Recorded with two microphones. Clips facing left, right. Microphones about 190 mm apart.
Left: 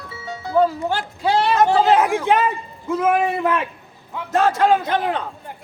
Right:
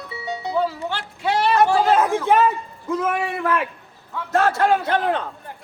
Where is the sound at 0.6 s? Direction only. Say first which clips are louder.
Left 8 dB; 45° left (ahead or behind).